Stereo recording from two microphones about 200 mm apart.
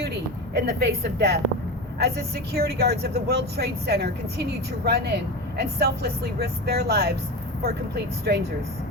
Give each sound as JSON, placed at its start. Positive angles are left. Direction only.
{"t": 0.6, "sound": "speech", "side_deg": -55}